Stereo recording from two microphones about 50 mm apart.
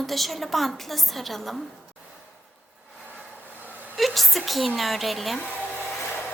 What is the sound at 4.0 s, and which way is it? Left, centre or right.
A woman's voice, centre.